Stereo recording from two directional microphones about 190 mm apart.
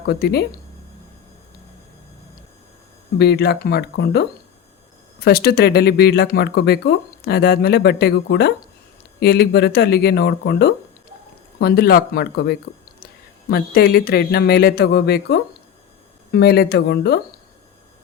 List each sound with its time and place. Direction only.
0.0 s speech: 55° left (ahead or behind)
3.2 s speech: 60° left (ahead or behind)